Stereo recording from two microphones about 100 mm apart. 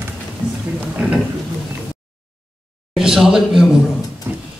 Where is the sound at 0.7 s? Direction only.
15° right (ahead or behind).